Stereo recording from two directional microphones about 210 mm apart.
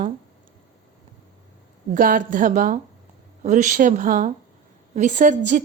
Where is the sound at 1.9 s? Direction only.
40° right (ahead or behind).